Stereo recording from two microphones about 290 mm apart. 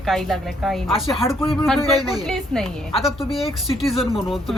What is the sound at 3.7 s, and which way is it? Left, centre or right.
Speech, centre.